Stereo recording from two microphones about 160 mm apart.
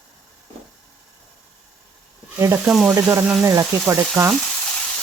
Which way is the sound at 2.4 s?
15° right (ahead or behind).